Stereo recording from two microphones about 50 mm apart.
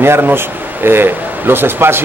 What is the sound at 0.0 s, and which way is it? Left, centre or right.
Speech, right.